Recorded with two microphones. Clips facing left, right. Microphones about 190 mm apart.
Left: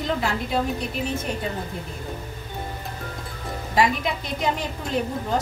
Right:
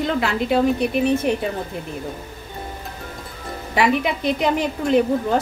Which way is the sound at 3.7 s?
65° right (ahead or behind).